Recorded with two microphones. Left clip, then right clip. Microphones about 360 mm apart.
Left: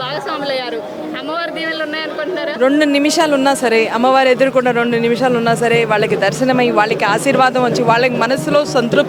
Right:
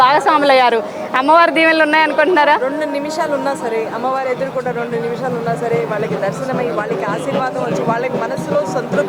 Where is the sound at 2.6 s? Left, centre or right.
Left.